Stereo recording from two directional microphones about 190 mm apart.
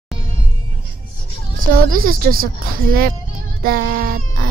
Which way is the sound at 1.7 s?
50° right (ahead or behind).